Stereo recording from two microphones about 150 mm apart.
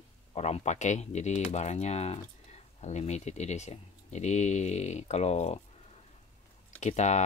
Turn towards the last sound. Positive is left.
turn(degrees=50)  # may be behind; listen again after turning